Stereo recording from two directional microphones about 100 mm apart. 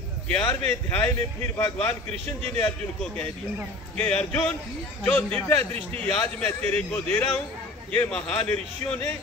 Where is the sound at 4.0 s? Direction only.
20° left (ahead or behind).